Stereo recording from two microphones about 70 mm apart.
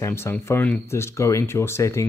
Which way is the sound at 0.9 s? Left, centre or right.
Left.